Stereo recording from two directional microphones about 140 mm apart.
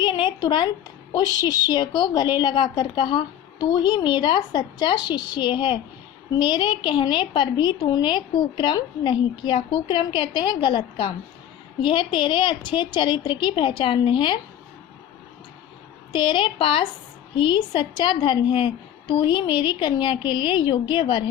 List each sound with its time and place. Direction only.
0.0 s a sound: 35° left (ahead or behind)
1.1 s a woman's voice: 30° left (ahead or behind)
16.1 s a woman's voice: 35° left (ahead or behind)